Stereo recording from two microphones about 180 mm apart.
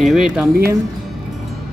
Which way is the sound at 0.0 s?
Centre (ahead or behind).